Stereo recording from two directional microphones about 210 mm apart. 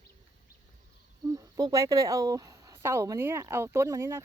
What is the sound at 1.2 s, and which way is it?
Speech, 15° right (ahead or behind).